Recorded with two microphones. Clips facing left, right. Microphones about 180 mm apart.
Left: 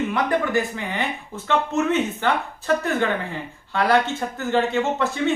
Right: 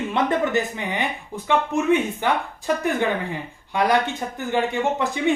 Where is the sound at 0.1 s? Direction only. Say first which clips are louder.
Right 1 dB; 20° right (ahead or behind).